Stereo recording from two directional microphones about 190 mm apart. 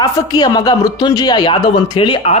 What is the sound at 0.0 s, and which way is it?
Speech, 20° left (ahead or behind).